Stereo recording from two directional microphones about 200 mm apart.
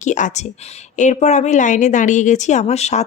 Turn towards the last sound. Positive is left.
turn(degrees=35)  # may be behind; listen again after turning